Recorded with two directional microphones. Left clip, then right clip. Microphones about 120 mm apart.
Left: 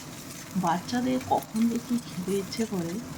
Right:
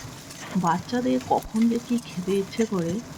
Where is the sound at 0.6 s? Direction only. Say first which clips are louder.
Right 3 dB; 45° right (ahead or behind).